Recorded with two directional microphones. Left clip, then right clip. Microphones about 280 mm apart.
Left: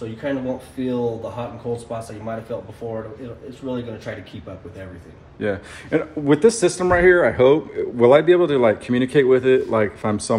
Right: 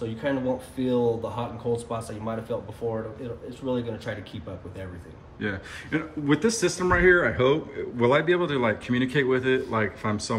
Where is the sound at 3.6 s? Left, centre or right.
Centre.